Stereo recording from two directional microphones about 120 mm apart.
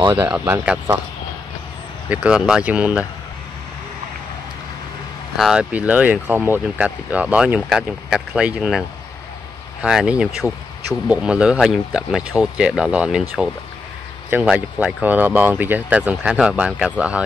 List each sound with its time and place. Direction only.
0.1 s speech: 20° right (ahead or behind)
2.0 s speech: 10° right (ahead or behind)
5.4 s speech: 5° right (ahead or behind)
14.4 s speech: 5° right (ahead or behind)